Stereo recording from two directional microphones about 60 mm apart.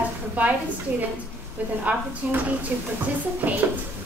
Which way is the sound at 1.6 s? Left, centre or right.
Right.